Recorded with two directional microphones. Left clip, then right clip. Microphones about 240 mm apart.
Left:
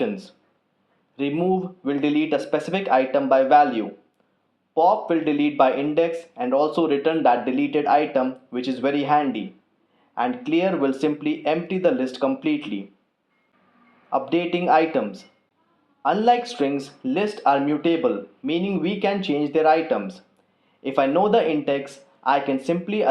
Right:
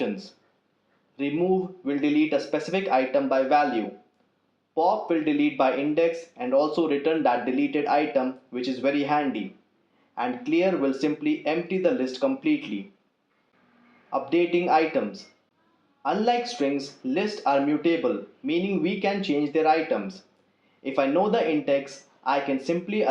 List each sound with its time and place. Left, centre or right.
1.1 s speech: left
14.1 s speech: left